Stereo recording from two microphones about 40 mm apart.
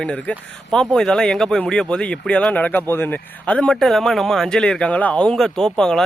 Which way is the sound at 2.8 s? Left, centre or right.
Left.